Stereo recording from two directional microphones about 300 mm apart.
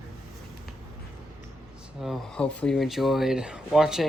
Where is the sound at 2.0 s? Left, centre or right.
Centre.